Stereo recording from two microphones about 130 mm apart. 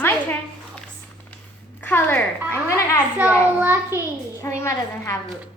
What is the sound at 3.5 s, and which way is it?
Speech, 15° right (ahead or behind).